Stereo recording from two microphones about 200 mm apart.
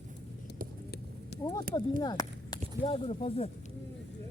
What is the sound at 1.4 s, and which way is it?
Speech, 15° left (ahead or behind).